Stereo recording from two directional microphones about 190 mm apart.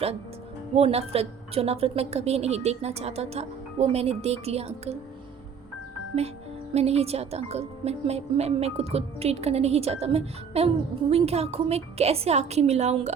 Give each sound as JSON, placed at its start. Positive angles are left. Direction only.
{"t": 0.8, "sound": "a woman's voice", "side_deg": -30}
{"t": 6.7, "sound": "a woman's voice", "side_deg": -35}